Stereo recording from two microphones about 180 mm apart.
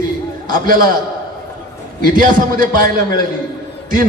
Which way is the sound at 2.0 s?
50° right (ahead or behind).